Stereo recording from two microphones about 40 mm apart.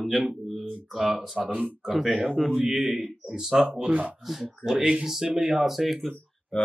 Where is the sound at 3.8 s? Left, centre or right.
Right.